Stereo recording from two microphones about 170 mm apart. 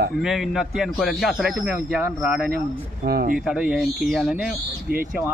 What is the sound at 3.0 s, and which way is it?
Speech, 65° right (ahead or behind).